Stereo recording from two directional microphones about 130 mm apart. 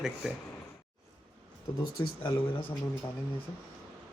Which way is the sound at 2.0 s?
40° left (ahead or behind).